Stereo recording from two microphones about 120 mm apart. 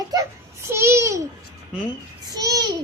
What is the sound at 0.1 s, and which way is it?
Child singing, 30° right (ahead or behind).